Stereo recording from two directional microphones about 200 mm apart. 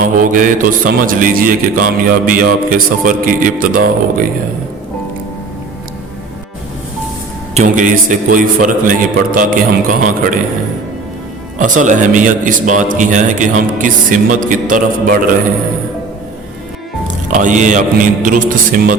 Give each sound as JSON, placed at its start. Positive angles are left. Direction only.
{"t": 0.2, "sound": "music", "side_deg": -40}
{"t": 7.5, "sound": "a man's voice", "side_deg": -40}
{"t": 9.9, "sound": "music", "side_deg": -40}
{"t": 11.5, "sound": "a man's voice", "side_deg": -40}
{"t": 17.3, "sound": "a man's voice", "side_deg": -40}